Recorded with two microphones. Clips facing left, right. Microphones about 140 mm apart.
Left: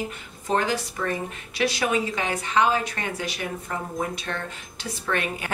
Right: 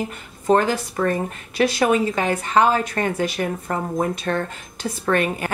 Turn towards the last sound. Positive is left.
turn(degrees=-45)  # may be behind; listen again after turning